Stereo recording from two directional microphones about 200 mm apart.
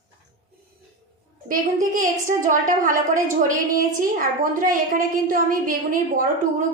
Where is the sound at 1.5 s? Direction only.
40° right (ahead or behind).